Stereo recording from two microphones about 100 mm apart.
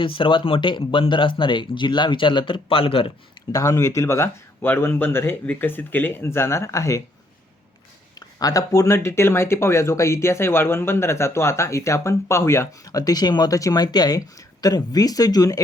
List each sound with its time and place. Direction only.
0.0 s speech: 60° left (ahead or behind)
3.5 s speech: 35° left (ahead or behind)
8.4 s speech: 35° left (ahead or behind)